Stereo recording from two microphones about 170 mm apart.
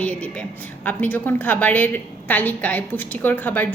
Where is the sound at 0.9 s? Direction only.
10° left (ahead or behind).